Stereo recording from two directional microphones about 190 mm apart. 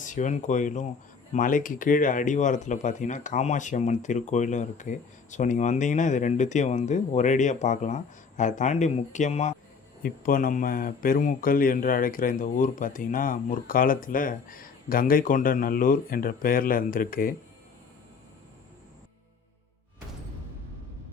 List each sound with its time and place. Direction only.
0.0 s speech: 40° left (ahead or behind)